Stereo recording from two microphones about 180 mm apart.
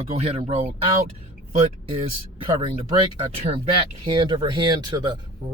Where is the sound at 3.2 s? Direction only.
35° right (ahead or behind).